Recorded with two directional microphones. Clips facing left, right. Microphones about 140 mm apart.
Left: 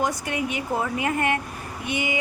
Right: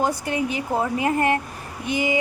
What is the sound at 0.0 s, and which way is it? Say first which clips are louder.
A woman's voice: right 3 dB; 30° right (ahead or behind).